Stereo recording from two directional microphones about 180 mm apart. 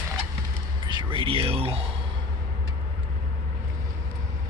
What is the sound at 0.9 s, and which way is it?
Speech, 25° right (ahead or behind).